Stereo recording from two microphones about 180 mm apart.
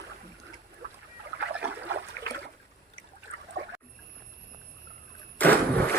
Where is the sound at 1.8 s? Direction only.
65° right (ahead or behind).